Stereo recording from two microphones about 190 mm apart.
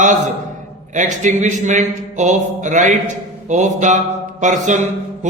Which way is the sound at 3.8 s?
40° right (ahead or behind).